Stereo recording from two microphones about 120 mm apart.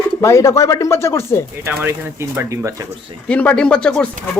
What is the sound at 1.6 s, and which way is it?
Speech, 20° right (ahead or behind).